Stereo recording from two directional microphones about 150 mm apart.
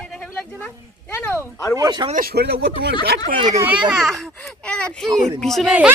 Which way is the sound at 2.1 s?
80° right.